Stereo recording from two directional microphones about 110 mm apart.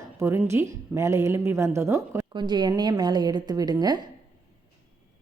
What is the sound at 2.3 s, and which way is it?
A woman's voice, 45° right (ahead or behind).